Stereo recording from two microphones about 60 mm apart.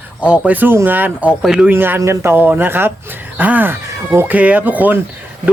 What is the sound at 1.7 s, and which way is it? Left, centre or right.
Speech, right.